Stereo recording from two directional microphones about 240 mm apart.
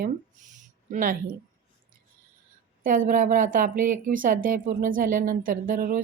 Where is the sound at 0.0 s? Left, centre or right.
Right.